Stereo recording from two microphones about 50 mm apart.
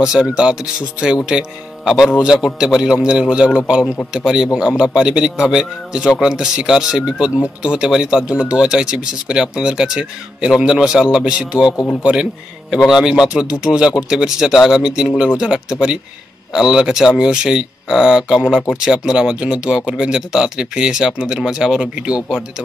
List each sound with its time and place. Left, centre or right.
0.0 s speech: centre
11.7 s speech: left
12.0 s speech: centre